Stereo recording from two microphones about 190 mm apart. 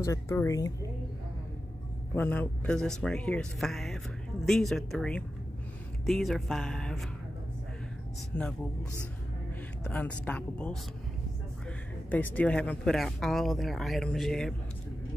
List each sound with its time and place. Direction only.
0.0 s speech: 15° left (ahead or behind)
2.1 s speech: 10° left (ahead or behind)
8.3 s speech: 5° left (ahead or behind)
9.8 s speech: 10° left (ahead or behind)
12.1 s speech: 10° left (ahead or behind)